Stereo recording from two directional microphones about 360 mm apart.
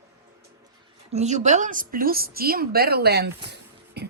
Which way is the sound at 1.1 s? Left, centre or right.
Centre.